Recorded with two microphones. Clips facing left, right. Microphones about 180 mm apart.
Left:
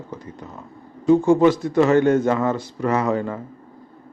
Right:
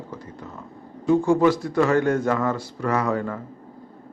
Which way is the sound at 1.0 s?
20° left (ahead or behind).